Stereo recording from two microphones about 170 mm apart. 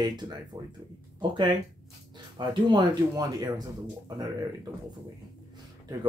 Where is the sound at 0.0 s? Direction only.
25° right (ahead or behind).